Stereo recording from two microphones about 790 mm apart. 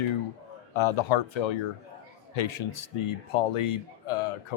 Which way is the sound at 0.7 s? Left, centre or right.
Left.